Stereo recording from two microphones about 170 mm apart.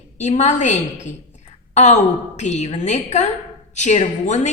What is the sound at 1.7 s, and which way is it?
Gasp, 45° left (ahead or behind).